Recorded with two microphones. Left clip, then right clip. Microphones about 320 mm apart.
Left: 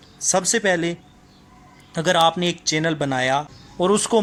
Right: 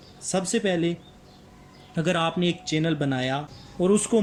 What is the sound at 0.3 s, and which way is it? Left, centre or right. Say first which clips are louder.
Speech: left 5 dB; centre.